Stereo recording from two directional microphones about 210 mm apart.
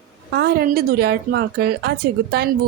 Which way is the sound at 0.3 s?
45° right (ahead or behind).